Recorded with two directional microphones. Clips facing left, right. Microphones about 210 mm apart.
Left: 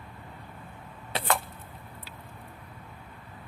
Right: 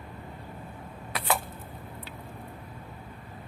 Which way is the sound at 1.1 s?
25° left (ahead or behind).